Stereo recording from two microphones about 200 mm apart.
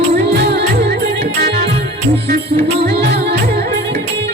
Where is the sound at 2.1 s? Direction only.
55° right (ahead or behind).